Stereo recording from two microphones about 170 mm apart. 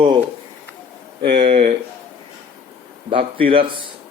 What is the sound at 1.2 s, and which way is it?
Speech, 30° right (ahead or behind).